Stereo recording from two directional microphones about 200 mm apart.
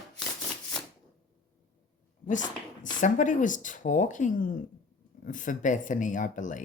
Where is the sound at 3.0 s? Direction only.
40° left (ahead or behind).